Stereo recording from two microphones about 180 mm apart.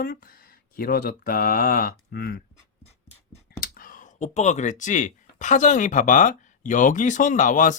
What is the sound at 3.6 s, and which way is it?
Speech, 55° left (ahead or behind).